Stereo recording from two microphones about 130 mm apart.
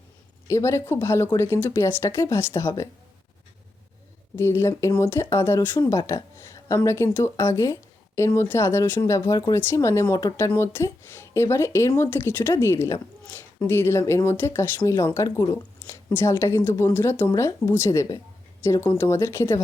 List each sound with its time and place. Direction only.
0.4 s speech: 20° left (ahead or behind)
4.4 s speech: 20° left (ahead or behind)